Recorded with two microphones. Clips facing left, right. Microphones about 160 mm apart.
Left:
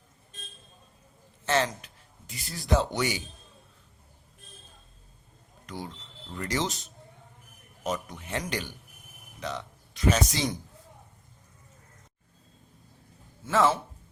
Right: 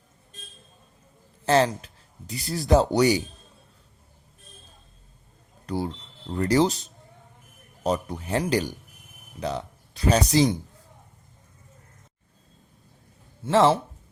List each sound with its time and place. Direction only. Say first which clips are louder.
1.5 s speech: right 6 dB; 35° right (ahead or behind)
5.6 s speech: right 10 dB; 35° right (ahead or behind)
7.9 s speech: right 7 dB; 35° right (ahead or behind)
13.4 s speech: right 5 dB; 30° right (ahead or behind)